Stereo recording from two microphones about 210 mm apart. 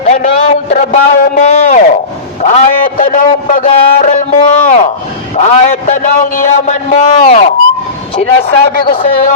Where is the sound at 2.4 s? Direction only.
35° left (ahead or behind).